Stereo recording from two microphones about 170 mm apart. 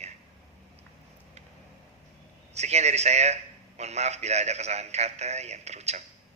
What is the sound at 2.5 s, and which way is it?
A man's voice, 40° right (ahead or behind).